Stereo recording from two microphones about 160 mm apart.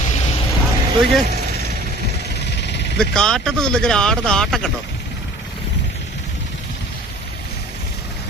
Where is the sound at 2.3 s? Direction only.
90° left.